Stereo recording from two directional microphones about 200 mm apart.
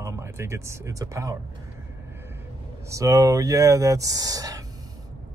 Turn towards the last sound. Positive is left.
turn(degrees=-15)  # may be behind; listen again after turning